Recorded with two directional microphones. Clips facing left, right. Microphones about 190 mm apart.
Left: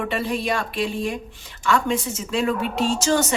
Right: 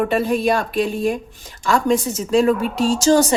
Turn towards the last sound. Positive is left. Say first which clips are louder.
# right 6 dB
turn(degrees=-35)  # may be behind; listen again after turning